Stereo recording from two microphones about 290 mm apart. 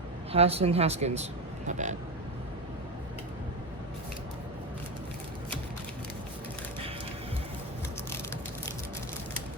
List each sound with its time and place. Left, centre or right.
0.3 s speech: right